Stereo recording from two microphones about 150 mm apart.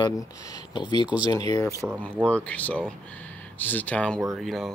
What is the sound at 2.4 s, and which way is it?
Speech, 10° left (ahead or behind).